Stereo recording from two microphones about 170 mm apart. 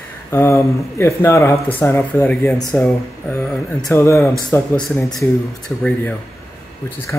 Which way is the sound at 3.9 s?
15° left (ahead or behind).